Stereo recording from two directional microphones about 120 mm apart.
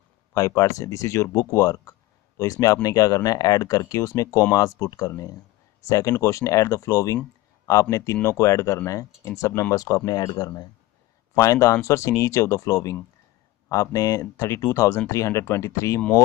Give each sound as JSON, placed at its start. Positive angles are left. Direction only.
{"t": 0.3, "sound": "speech", "side_deg": 25}